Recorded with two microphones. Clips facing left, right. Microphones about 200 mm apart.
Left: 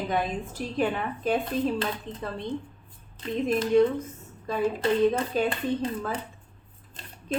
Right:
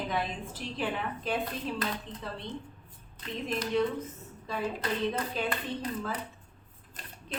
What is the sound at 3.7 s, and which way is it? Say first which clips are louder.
Speech: left 8 dB; 45° left (ahead or behind).